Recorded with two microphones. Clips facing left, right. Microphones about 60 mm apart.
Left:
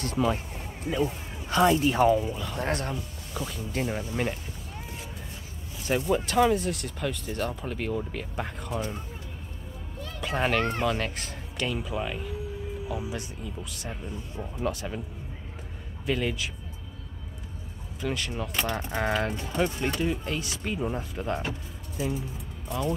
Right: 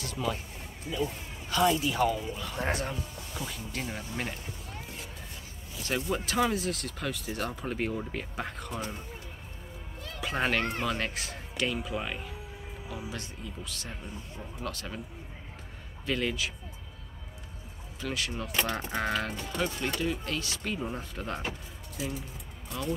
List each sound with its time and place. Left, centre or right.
0.0 s speech: left
2.3 s speech: centre
3.7 s speech: centre
6.0 s speech: centre
10.2 s speech: centre
12.9 s speech: centre
16.1 s speech: centre
18.3 s speech: centre
19.2 s speech: left; by 22.1 s centre